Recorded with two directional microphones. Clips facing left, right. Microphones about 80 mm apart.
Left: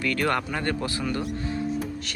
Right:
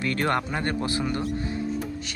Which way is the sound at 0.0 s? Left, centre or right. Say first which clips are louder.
Even; right.